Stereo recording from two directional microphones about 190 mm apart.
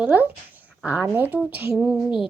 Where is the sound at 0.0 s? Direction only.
10° right (ahead or behind).